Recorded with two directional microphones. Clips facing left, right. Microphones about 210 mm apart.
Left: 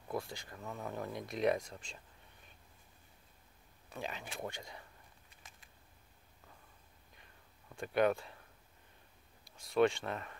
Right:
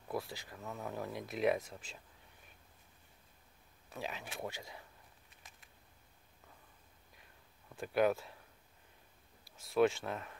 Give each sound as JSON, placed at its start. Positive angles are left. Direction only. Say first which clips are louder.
{"t": 0.1, "sound": "speech", "louder": "even", "side_deg": -5}
{"t": 3.9, "sound": "speech", "louder": "even", "side_deg": 0}
{"t": 5.4, "sound": "a sound", "louder": "left 1 dB", "side_deg": 0}
{"t": 7.7, "sound": "speech", "louder": "even", "side_deg": -5}
{"t": 9.6, "sound": "speech", "louder": "even", "side_deg": -5}